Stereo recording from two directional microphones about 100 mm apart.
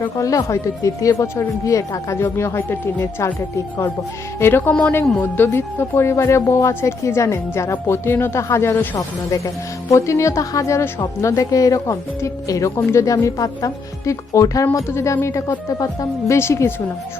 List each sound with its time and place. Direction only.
0.2 s speech: 35° left (ahead or behind)
4.4 s a woman's voice: 25° left (ahead or behind)
9.9 s speech: 30° left (ahead or behind)